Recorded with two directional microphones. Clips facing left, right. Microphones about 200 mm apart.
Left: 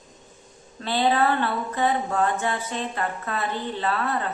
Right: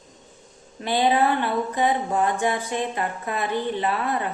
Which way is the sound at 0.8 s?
15° right (ahead or behind).